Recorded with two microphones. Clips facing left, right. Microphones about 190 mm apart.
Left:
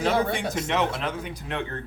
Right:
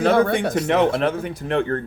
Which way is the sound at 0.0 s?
60° right (ahead or behind).